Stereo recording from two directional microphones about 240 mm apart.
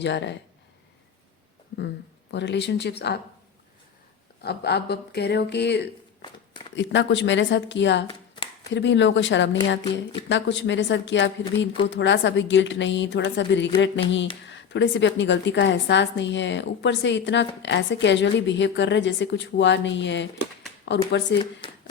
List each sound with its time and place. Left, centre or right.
0.0 s a woman's voice: left
2.3 s a woman's voice: left
4.4 s a woman's voice: left